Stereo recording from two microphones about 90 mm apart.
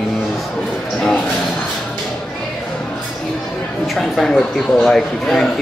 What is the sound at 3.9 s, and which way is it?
Speech, 5° left (ahead or behind).